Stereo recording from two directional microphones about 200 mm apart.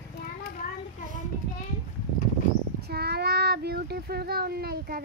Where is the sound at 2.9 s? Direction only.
55° right (ahead or behind).